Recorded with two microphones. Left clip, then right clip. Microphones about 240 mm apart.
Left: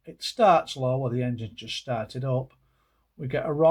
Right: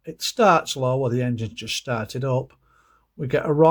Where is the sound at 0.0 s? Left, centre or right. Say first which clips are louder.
Right 3 dB; right.